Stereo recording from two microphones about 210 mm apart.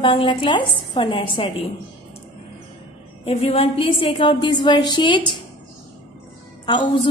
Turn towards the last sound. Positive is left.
turn(degrees=20)  # may be behind; listen again after turning